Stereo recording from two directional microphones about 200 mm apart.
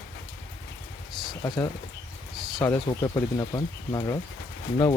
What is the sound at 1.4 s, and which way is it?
Speech, 20° left (ahead or behind).